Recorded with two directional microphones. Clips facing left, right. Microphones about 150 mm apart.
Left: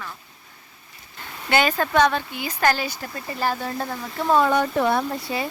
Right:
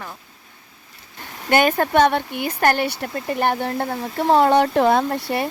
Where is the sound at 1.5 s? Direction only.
50° right (ahead or behind).